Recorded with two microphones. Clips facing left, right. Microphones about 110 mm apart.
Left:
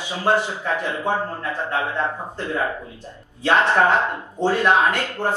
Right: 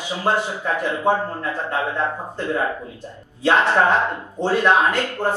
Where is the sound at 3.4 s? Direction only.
15° right (ahead or behind).